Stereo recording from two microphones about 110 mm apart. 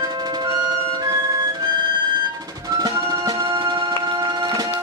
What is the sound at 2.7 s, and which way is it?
Music, 35° right (ahead or behind).